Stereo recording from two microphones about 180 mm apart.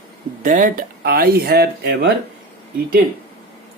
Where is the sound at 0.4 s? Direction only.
50° right (ahead or behind).